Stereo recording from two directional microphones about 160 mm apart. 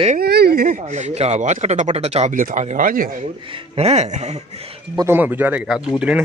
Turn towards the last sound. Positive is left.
turn(degrees=-5)  # may be behind; listen again after turning